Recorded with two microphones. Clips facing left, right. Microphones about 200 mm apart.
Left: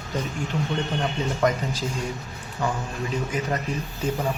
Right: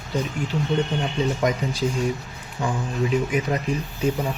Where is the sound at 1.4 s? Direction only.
10° right (ahead or behind).